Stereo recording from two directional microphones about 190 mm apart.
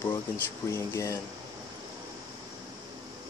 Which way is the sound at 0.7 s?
15° left (ahead or behind).